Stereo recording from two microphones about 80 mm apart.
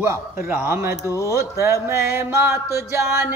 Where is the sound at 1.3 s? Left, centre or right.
Right.